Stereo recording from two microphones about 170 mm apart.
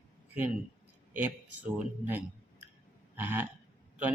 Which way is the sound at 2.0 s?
10° right (ahead or behind).